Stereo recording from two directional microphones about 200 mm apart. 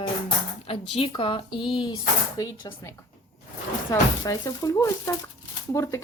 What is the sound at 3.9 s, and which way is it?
Speech, 15° left (ahead or behind).